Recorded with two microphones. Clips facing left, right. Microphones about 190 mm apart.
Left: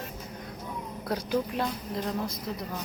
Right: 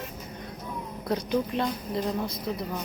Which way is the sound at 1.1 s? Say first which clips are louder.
Right 2 dB; 5° left (ahead or behind).